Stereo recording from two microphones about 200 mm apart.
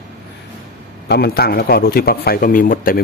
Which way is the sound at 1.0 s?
55° left (ahead or behind).